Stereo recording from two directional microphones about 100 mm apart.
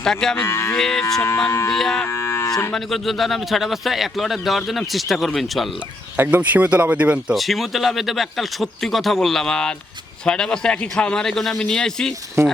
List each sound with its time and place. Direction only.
0.0 s a man's voice: 5° left (ahead or behind)
0.3 s music: 25° left (ahead or behind)
0.8 s a man's voice: 5° left (ahead or behind)
1.5 s speech: 25° left (ahead or behind)
1.7 s a man's voice: 5° left (ahead or behind)
2.0 s moo: 30° left (ahead or behind)
2.7 s a man's voice: centre (ahead or behind)
6.1 s speech: 15° right (ahead or behind)
7.3 s a man's voice: centre (ahead or behind)
12.4 s speech: 30° right (ahead or behind)